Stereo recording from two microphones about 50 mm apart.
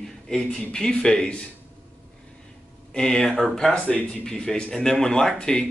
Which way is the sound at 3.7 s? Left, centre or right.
Left.